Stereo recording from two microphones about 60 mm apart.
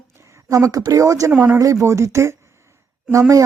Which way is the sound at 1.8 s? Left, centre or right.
Right.